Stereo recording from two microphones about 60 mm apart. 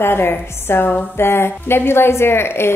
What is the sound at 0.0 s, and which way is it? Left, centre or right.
A woman's voice, left.